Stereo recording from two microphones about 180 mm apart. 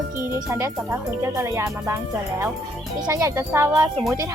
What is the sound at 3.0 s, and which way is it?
Speech, 20° right (ahead or behind).